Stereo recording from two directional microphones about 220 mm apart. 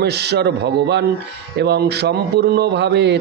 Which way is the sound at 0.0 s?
50° right (ahead or behind).